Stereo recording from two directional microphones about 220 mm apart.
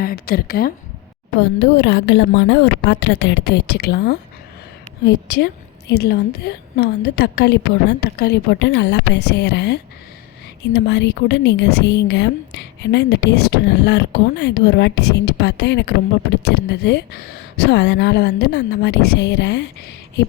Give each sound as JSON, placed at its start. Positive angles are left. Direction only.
{"t": 0.0, "sound": "a woman's voice", "side_deg": 45}
{"t": 1.4, "sound": "a woman's voice", "side_deg": 60}